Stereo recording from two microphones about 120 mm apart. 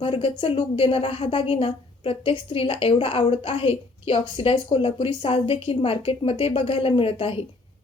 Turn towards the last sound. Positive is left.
turn(degrees=50)  # may be behind; listen again after turning